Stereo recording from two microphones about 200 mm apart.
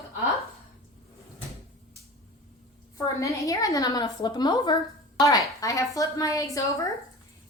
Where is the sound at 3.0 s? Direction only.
15° left (ahead or behind).